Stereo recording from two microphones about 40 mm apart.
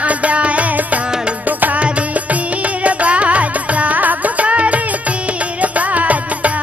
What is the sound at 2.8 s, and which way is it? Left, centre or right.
Music, right.